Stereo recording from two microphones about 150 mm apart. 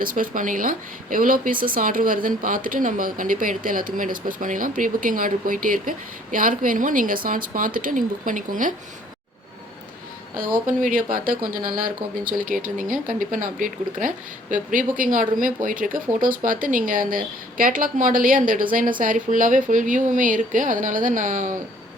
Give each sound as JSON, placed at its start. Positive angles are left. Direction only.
{"t": 0.0, "sound": "speech", "side_deg": -65}
{"t": 10.3, "sound": "speech", "side_deg": -65}